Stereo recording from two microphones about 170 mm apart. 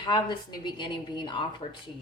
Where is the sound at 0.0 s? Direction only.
25° left (ahead or behind).